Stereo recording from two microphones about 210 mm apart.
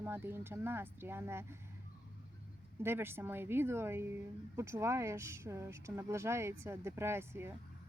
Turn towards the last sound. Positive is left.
turn(degrees=-10)  # may be behind; listen again after turning